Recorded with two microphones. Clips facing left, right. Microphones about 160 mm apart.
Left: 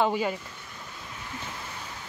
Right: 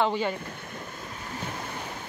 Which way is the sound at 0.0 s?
10° left (ahead or behind).